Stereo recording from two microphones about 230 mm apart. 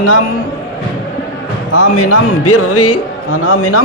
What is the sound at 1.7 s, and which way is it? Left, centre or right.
Speech, left.